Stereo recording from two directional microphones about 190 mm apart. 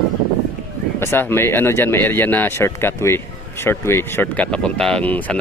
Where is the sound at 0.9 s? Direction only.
10° left (ahead or behind).